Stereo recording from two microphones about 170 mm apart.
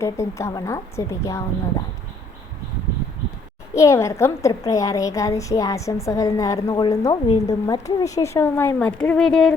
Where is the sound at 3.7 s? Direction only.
15° left (ahead or behind).